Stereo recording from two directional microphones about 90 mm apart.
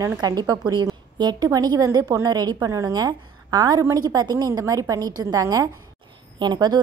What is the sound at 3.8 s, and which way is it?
A woman's voice, 35° right (ahead or behind).